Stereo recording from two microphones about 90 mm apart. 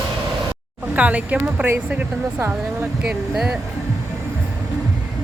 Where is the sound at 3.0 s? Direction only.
10° right (ahead or behind).